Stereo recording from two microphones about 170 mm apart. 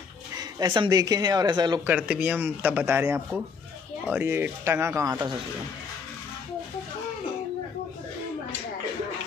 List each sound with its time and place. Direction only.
0.4 s speech: 25° right (ahead or behind)
1.9 s speech: 5° right (ahead or behind)